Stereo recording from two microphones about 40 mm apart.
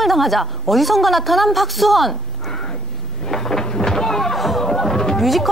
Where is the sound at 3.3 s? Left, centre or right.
Centre.